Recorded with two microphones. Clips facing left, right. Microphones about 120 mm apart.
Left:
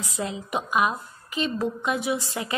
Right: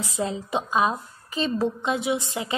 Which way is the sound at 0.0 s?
30° right (ahead or behind).